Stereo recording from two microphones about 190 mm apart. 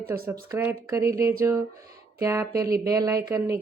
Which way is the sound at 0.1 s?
10° right (ahead or behind).